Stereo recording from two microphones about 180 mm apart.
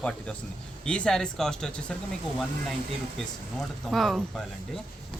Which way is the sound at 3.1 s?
Centre (ahead or behind).